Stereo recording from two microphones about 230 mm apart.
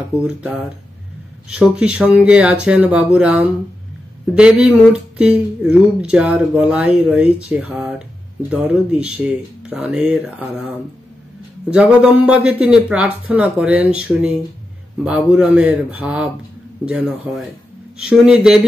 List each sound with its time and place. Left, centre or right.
0.2 s speech: centre
11.7 s speech: centre